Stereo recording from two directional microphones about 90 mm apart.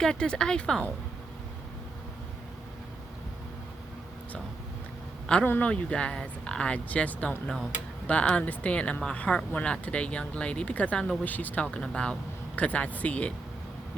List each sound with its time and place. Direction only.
0.0 s speech: 10° left (ahead or behind)
5.2 s a man's voice: 10° left (ahead or behind)